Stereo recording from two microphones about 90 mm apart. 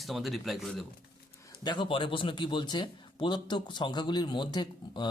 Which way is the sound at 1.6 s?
65° left (ahead or behind).